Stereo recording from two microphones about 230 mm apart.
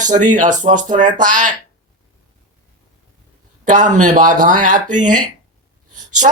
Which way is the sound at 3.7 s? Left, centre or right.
Right.